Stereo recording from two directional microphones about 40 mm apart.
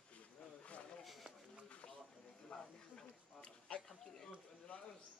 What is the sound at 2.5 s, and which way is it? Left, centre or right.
Speech, left.